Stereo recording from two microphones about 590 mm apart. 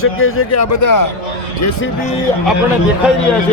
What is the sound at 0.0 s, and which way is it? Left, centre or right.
A man's voice, left.